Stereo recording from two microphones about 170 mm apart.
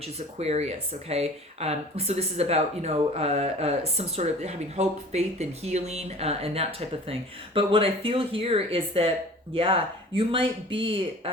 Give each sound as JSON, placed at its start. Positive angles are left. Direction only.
{"t": 0.3, "sound": "speech", "side_deg": -40}